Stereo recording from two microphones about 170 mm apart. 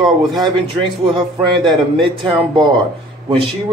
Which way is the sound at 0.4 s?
25° right (ahead or behind).